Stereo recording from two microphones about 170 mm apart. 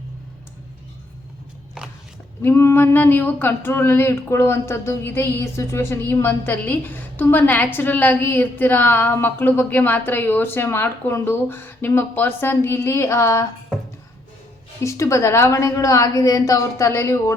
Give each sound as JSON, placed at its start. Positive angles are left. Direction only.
{"t": 2.4, "sound": "speech", "side_deg": 15}
{"t": 14.8, "sound": "speech", "side_deg": 20}